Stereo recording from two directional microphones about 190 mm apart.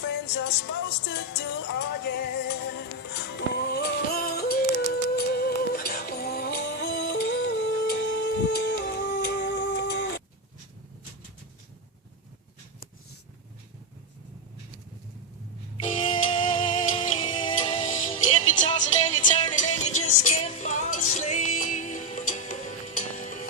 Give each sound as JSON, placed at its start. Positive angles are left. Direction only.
{"t": 0.0, "sound": "music", "side_deg": 70}
{"t": 16.0, "sound": "music", "side_deg": 25}
{"t": 17.8, "sound": "music", "side_deg": 40}